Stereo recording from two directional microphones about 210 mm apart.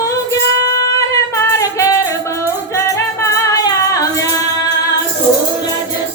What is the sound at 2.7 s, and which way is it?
Music, 15° left (ahead or behind).